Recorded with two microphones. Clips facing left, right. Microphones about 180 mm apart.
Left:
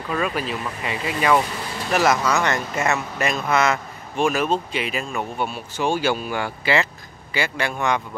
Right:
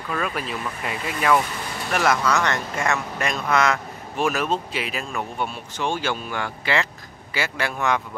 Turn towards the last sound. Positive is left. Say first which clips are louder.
# left 1 dB
turn(degrees=0)  # may be behind; listen again after turning